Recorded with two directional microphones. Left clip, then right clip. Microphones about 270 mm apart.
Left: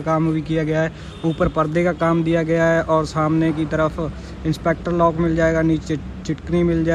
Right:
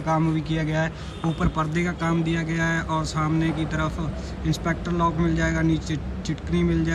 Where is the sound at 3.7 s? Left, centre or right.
Centre.